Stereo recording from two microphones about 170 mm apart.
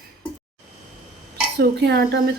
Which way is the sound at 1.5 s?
75° right (ahead or behind).